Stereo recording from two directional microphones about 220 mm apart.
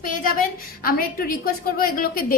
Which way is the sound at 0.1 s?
40° left (ahead or behind).